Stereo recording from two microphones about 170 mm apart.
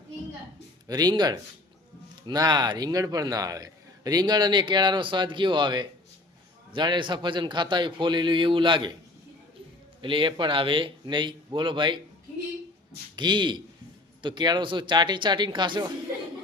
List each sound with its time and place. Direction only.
0.9 s a man's voice: 25° right (ahead or behind)
10.0 s a man's voice: 30° right (ahead or behind)
13.1 s a man's voice: 25° right (ahead or behind)